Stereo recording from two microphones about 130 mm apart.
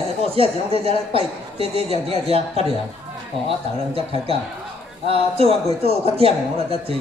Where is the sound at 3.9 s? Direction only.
45° right (ahead or behind).